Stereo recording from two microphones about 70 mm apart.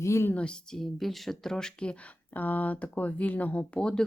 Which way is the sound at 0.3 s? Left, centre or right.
Centre.